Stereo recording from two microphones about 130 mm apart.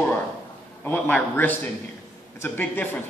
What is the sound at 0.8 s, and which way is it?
A man's voice, 15° left (ahead or behind).